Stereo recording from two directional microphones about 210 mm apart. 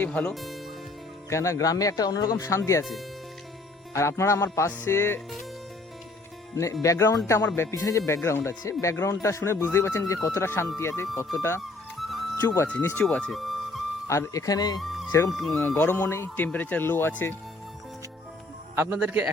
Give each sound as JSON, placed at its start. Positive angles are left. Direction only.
{"t": 0.0, "sound": "speech", "side_deg": 5}
{"t": 1.3, "sound": "speech", "side_deg": 15}
{"t": 3.9, "sound": "speech", "side_deg": 15}
{"t": 6.8, "sound": "speech", "side_deg": 15}
{"t": 11.6, "sound": "music", "side_deg": 0}
{"t": 12.4, "sound": "speech", "side_deg": 10}
{"t": 13.0, "sound": "music", "side_deg": 5}
{"t": 14.1, "sound": "speech", "side_deg": 15}
{"t": 14.8, "sound": "music", "side_deg": 0}
{"t": 15.3, "sound": "speech", "side_deg": 0}
{"t": 18.8, "sound": "a man's voice", "side_deg": -10}